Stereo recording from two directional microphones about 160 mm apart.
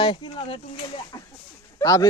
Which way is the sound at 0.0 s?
30° left (ahead or behind).